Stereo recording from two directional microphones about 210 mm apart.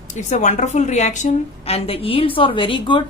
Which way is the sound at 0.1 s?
35° left (ahead or behind).